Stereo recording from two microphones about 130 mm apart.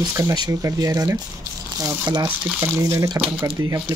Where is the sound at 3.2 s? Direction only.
40° right (ahead or behind).